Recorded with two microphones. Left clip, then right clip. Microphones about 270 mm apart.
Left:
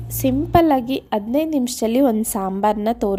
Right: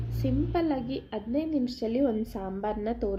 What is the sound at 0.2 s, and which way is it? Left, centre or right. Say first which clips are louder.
A woman's voice: left 13 dB; left.